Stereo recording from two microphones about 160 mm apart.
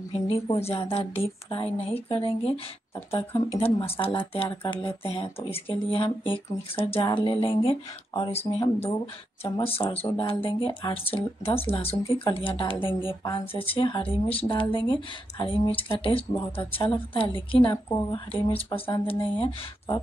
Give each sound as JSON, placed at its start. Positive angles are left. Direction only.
{"t": 0.1, "sound": "speech", "side_deg": 35}